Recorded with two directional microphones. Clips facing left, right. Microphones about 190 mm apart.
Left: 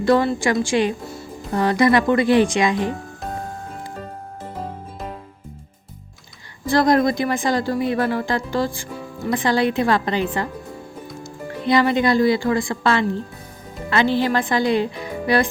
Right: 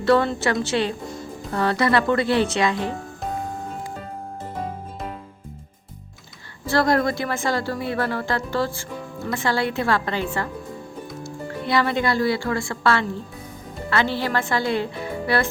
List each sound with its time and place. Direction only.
0.0 s speech: 10° left (ahead or behind)
6.7 s speech: 15° left (ahead or behind)